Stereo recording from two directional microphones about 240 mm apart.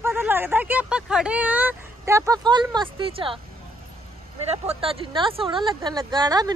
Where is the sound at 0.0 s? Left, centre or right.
Centre.